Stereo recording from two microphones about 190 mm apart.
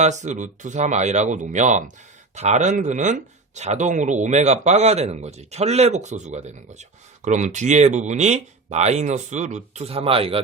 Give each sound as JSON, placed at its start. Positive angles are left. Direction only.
{"t": 0.0, "sound": "speech", "side_deg": -40}